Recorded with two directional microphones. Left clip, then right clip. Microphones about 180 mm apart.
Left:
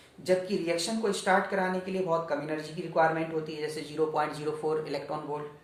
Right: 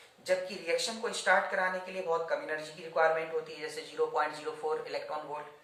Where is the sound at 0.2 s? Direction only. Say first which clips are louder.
Left 4 dB; 25° left (ahead or behind).